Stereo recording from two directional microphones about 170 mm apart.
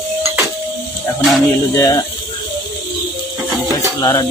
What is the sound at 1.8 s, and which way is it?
Speech, 20° left (ahead or behind).